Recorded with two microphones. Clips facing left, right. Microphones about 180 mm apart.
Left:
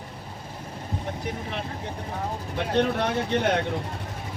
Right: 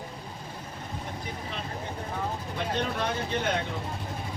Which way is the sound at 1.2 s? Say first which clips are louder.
Left 5 dB; 65° left (ahead or behind).